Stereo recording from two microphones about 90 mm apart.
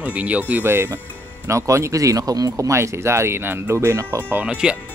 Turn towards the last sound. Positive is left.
turn(degrees=-15)  # may be behind; listen again after turning